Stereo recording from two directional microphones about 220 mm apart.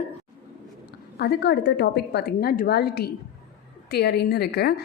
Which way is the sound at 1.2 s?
45° left (ahead or behind).